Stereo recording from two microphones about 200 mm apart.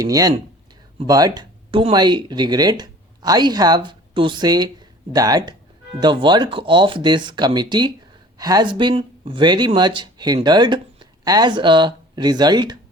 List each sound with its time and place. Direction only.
0.0 s speech: 20° right (ahead or behind)